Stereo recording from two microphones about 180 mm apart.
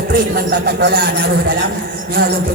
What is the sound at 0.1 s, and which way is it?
A man's voice, 70° right (ahead or behind).